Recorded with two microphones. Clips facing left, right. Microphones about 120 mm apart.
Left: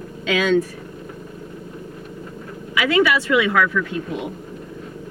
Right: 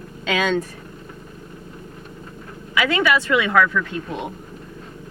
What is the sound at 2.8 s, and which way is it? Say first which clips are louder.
Speech: left 3 dB; 30° right (ahead or behind).